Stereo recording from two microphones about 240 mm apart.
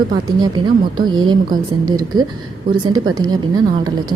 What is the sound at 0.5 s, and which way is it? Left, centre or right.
A woman's voice, centre.